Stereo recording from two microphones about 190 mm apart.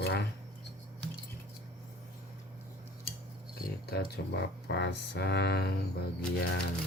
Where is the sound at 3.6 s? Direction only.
55° left (ahead or behind).